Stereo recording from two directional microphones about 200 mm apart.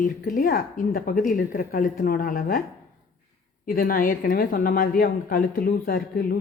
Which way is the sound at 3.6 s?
45° left (ahead or behind).